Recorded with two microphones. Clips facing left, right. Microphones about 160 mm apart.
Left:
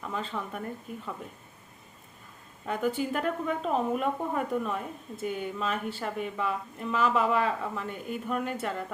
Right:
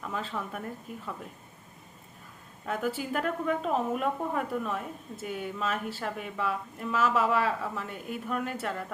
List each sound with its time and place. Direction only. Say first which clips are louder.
0.0 s a woman's voice: even; centre (ahead or behind)
2.6 s a woman's voice: left 2 dB; centre (ahead or behind)